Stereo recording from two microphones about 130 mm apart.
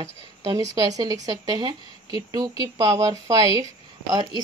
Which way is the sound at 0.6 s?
30° right (ahead or behind).